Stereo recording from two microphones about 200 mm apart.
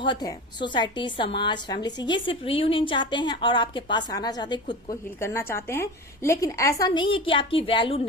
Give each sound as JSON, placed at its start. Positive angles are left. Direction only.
{"t": 0.0, "sound": "a woman's voice", "side_deg": 20}
{"t": 5.2, "sound": "a woman's voice", "side_deg": 10}